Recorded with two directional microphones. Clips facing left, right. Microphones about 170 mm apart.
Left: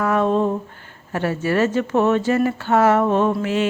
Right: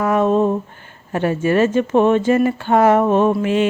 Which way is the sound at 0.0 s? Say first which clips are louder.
Right 3 dB; 20° right (ahead or behind).